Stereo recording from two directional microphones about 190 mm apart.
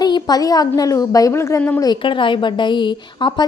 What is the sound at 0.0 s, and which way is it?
A woman's voice, 20° left (ahead or behind).